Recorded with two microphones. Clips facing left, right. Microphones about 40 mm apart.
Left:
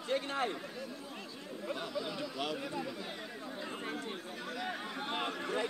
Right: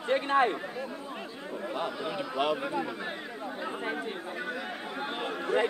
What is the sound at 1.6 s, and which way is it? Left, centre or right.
Speech, right.